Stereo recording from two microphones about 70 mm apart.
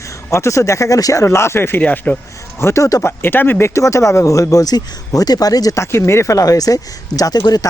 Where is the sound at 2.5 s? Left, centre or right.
Left.